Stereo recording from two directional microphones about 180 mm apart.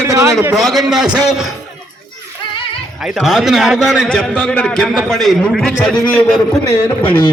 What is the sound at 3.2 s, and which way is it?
A man's voice, centre (ahead or behind).